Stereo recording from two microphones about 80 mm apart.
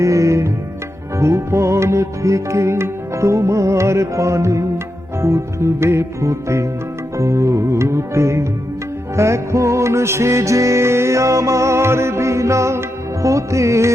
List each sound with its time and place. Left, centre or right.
0.0 s music: right